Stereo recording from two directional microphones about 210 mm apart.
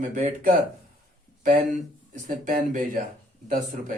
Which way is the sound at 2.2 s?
40° right (ahead or behind).